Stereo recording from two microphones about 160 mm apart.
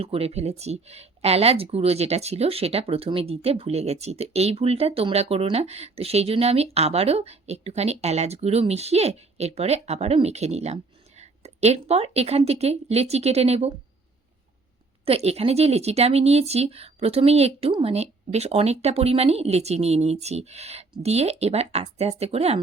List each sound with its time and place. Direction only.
0.0 s speech: 40° right (ahead or behind)
15.0 s speech: 40° right (ahead or behind)